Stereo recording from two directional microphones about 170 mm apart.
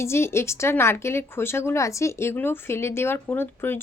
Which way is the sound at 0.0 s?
15° left (ahead or behind).